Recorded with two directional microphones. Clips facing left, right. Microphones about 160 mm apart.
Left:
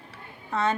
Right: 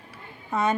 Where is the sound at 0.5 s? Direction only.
10° right (ahead or behind).